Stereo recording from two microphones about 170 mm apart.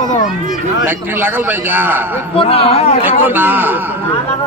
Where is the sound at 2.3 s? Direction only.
35° left (ahead or behind).